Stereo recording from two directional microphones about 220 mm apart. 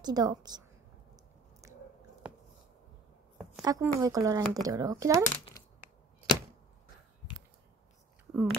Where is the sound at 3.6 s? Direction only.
15° right (ahead or behind).